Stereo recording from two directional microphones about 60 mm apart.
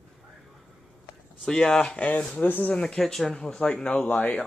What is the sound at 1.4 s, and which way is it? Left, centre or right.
Speech, centre.